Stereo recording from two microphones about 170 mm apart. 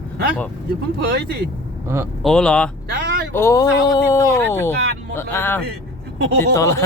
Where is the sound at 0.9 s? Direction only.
75° right (ahead or behind).